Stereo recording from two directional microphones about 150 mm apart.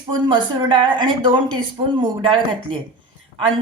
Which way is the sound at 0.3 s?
30° right (ahead or behind).